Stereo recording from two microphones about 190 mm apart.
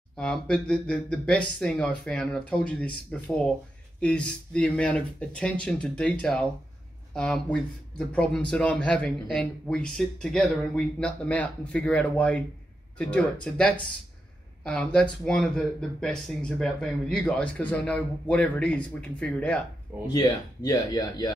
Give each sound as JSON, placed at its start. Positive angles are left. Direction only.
{"t": 0.1, "sound": "a man's voice", "side_deg": 5}
{"t": 20.1, "sound": "speech", "side_deg": 20}